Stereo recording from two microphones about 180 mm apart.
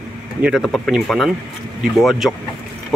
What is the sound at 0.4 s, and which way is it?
Speech, centre (ahead or behind).